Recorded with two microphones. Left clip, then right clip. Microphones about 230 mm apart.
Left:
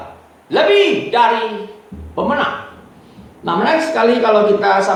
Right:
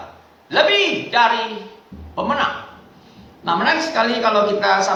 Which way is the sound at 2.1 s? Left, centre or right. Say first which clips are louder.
Left 3 dB; right.